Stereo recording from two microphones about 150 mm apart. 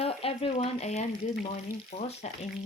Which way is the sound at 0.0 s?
40° left (ahead or behind).